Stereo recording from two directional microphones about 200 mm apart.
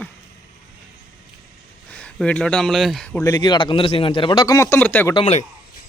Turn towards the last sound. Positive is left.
turn(degrees=30)  # may be behind; listen again after turning